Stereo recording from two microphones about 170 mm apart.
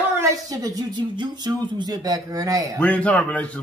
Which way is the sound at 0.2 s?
20° right (ahead or behind).